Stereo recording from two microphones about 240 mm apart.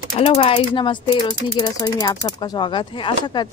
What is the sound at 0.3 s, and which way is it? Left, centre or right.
Speech, left.